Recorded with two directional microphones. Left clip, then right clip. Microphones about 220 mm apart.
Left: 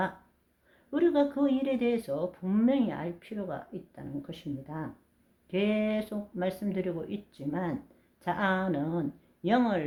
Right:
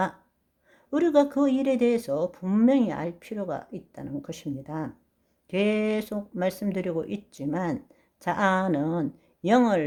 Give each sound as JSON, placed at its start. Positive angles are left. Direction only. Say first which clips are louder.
{"t": 0.9, "sound": "speech", "louder": "right 5 dB", "side_deg": -45}